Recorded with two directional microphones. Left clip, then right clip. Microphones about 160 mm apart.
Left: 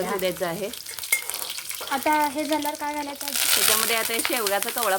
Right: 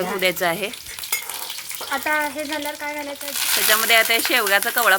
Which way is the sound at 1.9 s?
75° left (ahead or behind).